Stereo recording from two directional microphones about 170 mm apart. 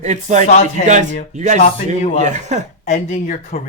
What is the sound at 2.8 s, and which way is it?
Speech, 45° left (ahead or behind).